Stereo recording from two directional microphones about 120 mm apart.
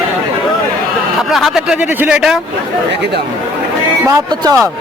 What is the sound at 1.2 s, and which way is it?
Speech, centre (ahead or behind).